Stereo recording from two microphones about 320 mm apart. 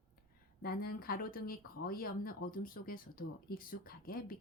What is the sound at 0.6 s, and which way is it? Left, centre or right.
Speech, left.